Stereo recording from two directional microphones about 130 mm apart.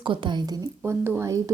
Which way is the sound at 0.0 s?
40° right (ahead or behind).